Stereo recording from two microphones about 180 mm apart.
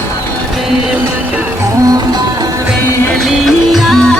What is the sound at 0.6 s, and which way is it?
Music, 5° right (ahead or behind).